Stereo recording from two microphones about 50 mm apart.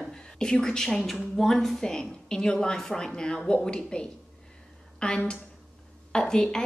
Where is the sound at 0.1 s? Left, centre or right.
Centre.